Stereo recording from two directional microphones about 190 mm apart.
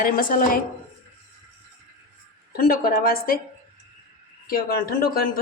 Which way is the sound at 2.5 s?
50° left (ahead or behind).